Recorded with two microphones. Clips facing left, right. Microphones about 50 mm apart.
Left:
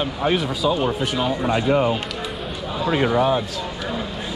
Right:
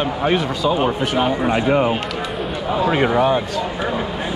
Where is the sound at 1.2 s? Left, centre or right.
Right.